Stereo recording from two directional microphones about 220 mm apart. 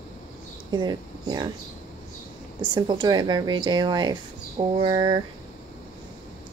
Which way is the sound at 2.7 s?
20° right (ahead or behind).